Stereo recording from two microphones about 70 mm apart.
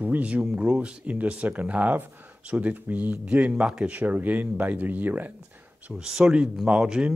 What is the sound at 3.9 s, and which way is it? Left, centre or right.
A man's voice, right.